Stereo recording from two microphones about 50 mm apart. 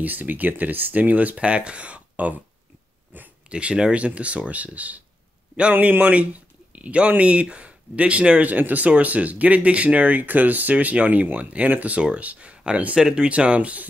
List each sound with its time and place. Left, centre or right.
0.0 s speech: right
3.4 s speech: right
8.5 s speech: right